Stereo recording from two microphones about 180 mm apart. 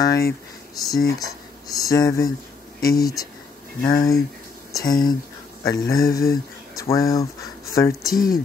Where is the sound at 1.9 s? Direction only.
20° left (ahead or behind).